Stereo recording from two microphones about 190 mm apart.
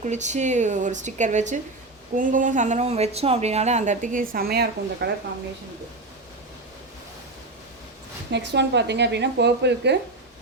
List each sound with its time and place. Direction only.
0.0 s speech: 40° right (ahead or behind); by 5.1 s 60° right (ahead or behind)
8.3 s a woman's voice: 65° right (ahead or behind)